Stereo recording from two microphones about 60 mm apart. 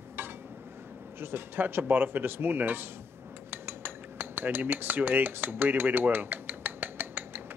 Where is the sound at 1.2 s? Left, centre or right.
Right.